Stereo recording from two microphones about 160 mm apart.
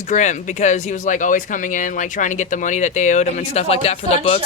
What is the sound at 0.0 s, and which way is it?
Speech, 50° left (ahead or behind).